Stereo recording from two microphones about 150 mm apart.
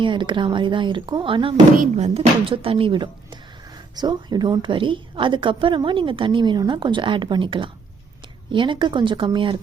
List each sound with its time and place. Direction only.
0.0 s a woman's voice: 30° right (ahead or behind)
1.8 s a woman's voice: 45° right (ahead or behind)